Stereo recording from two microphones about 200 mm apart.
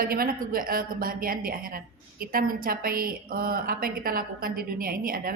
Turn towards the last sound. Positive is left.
turn(degrees=-45)  # may be behind; listen again after turning